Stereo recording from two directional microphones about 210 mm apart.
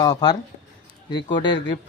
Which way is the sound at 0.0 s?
20° left (ahead or behind).